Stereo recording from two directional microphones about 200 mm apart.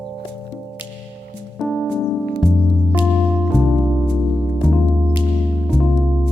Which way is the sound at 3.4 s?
Centre (ahead or behind).